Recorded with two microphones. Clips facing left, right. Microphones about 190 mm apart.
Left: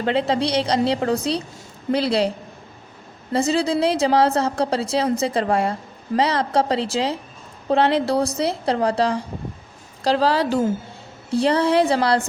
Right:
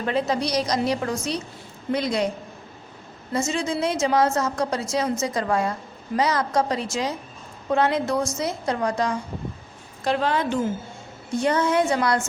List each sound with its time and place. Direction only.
0.0 s a woman's voice: 30° left (ahead or behind)
3.3 s a woman's voice: 35° left (ahead or behind)